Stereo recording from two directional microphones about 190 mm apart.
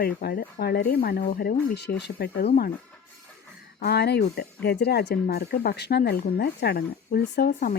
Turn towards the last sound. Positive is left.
turn(degrees=55)  # may be behind; listen again after turning